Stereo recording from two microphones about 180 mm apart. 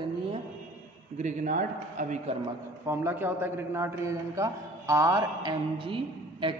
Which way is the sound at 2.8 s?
10° right (ahead or behind).